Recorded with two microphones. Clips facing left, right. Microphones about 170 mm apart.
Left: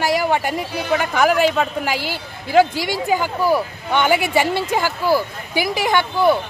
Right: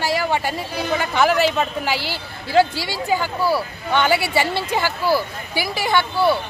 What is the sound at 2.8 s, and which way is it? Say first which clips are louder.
Speech: left 2 dB; 15° left (ahead or behind).